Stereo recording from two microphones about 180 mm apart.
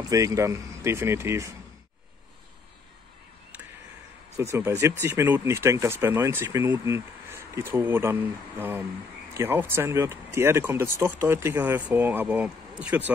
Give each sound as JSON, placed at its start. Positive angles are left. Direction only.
{"t": 0.1, "sound": "speech", "side_deg": -20}
{"t": 4.4, "sound": "speech", "side_deg": -15}